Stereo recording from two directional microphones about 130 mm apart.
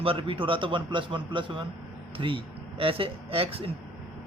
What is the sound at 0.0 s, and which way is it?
A man's voice, 45° right (ahead or behind).